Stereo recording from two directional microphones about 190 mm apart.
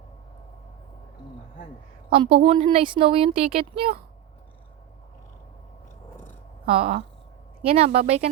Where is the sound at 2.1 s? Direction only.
30° right (ahead or behind).